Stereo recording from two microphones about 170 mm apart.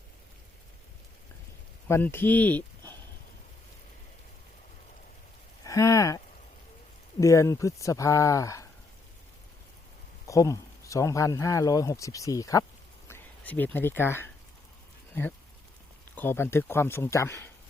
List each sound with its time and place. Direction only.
1.9 s speech: 10° left (ahead or behind)
5.6 s a sound: 20° left (ahead or behind)
7.2 s speech: 20° left (ahead or behind)
10.2 s speech: 20° left (ahead or behind)
16.1 s speech: 15° left (ahead or behind)